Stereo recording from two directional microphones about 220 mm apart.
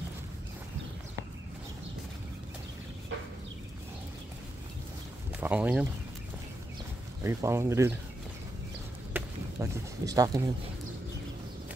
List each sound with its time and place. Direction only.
5.4 s speech: 5° right (ahead or behind)
7.2 s speech: 10° right (ahead or behind)
9.1 s speech: 15° right (ahead or behind)